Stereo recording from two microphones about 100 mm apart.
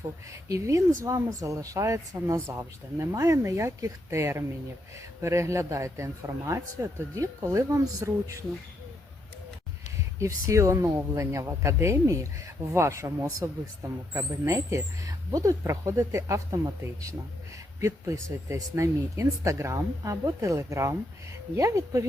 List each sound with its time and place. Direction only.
0.4 s speech: 35° right (ahead or behind)
10.2 s speech: 30° right (ahead or behind)
17.7 s speech: 30° right (ahead or behind)